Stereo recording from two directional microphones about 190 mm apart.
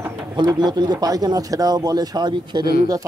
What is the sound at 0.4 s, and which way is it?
Speech, 20° right (ahead or behind).